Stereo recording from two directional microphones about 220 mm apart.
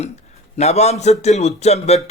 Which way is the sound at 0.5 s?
30° left (ahead or behind).